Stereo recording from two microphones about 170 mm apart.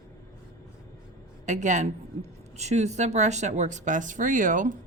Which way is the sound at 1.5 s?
45° right (ahead or behind).